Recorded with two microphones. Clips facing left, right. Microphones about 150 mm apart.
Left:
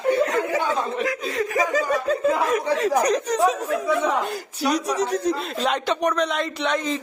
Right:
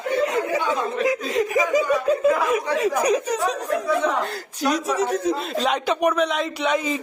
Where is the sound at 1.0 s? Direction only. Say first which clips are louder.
Right 3 dB; 20° right (ahead or behind).